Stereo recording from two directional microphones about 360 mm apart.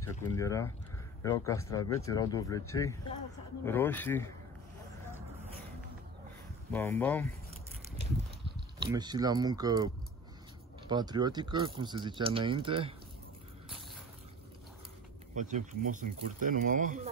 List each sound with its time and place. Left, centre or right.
0.0 s speech: centre
6.7 s speech: centre
8.0 s a sound: centre
10.9 s speech: centre
15.3 s speech: right